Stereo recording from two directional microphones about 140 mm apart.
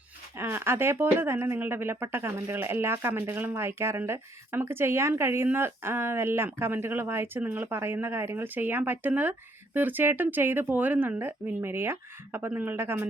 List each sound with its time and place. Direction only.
0.3 s speech: 15° right (ahead or behind)